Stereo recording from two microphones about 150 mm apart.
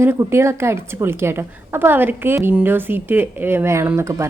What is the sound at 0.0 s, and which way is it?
A woman's voice, 15° right (ahead or behind).